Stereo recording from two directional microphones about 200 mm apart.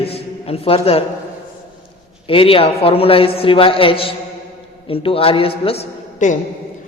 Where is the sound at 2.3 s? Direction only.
25° left (ahead or behind).